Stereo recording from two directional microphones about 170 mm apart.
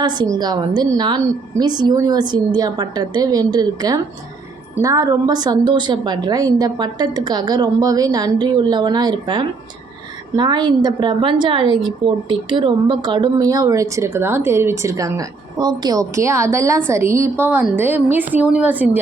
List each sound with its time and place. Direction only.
0.0 s a woman's voice: 25° right (ahead or behind); by 18.9 s 10° right (ahead or behind)